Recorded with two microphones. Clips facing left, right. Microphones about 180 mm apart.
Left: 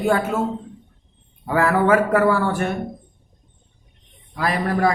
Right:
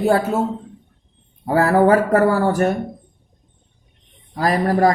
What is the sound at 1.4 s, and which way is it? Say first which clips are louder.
Speech: right 3 dB; 35° right (ahead or behind).